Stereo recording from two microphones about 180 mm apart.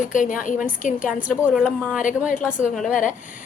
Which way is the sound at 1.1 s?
5° right (ahead or behind).